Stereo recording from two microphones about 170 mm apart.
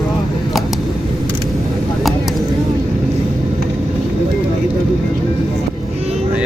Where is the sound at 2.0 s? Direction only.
Centre (ahead or behind).